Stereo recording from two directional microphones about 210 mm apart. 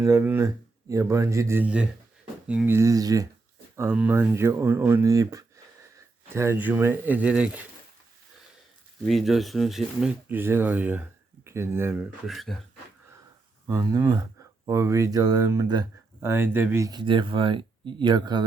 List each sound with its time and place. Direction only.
0.0 s speech: 10° right (ahead or behind)
9.0 s speech: centre (ahead or behind)
13.7 s speech: 15° right (ahead or behind)